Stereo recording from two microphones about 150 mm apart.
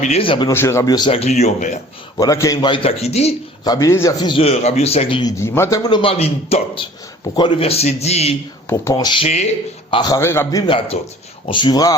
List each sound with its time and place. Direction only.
0.0 s a man's voice: 40° left (ahead or behind)
0.5 s speech: 20° left (ahead or behind)
1.1 s a man's voice: 45° left (ahead or behind)
2.1 s speech: 20° left (ahead or behind)
2.6 s a man's voice: 35° left (ahead or behind)
3.6 s speech: 25° left (ahead or behind)
4.3 s a man's voice: 40° left (ahead or behind)
5.4 s a man's voice: 15° left (ahead or behind); by 8.4 s 45° left (ahead or behind)
8.7 s speech: 20° left (ahead or behind)
9.2 s a man's voice: 45° left (ahead or behind)
9.9 s speech: 30° left (ahead or behind)
10.2 s a man's voice: 15° left (ahead or behind)
10.7 s a man's voice: 35° left (ahead or behind)